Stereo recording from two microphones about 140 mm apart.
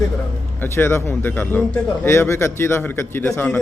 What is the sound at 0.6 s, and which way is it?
Speech, 15° left (ahead or behind).